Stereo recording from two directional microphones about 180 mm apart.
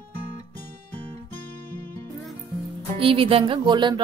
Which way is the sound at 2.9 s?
30° right (ahead or behind).